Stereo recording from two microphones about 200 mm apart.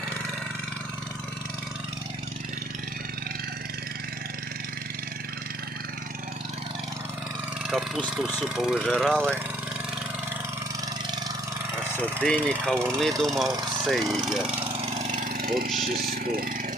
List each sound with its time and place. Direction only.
7.7 s speech: centre (ahead or behind)
11.9 s speech: 5° left (ahead or behind)
14.8 s lawn mower: 35° right (ahead or behind)
15.8 s speech: 45° right (ahead or behind)